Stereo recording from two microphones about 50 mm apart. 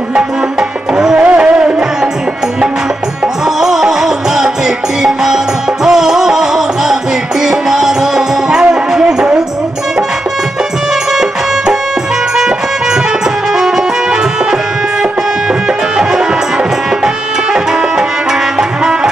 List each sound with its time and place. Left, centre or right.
0.1 s music: centre
3.4 s music: centre
12.4 s music: centre
16.0 s music: centre